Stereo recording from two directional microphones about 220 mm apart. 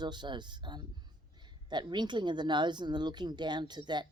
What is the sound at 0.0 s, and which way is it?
Speech, 20° right (ahead or behind).